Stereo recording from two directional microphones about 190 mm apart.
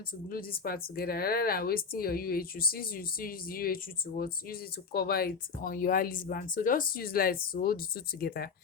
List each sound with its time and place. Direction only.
0.3 s speech: 50° left (ahead or behind)